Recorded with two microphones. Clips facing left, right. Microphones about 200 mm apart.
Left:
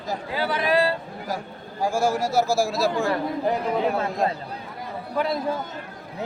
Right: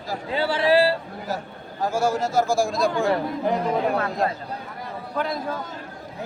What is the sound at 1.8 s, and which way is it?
A man's voice, 10° left (ahead or behind).